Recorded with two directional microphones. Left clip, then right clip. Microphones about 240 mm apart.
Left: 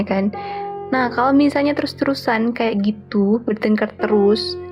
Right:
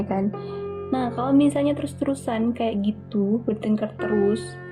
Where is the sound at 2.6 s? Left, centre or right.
Left.